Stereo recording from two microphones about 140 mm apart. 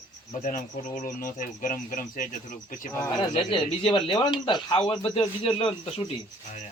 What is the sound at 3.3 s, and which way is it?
Speech, 40° left (ahead or behind).